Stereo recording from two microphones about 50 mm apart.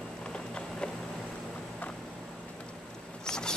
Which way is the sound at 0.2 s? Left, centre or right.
Centre.